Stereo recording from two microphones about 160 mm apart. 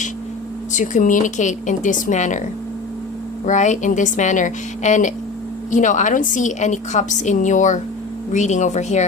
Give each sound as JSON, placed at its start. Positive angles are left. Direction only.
{"t": 0.7, "sound": "a woman's voice", "side_deg": 50}
{"t": 3.4, "sound": "a woman's voice", "side_deg": 50}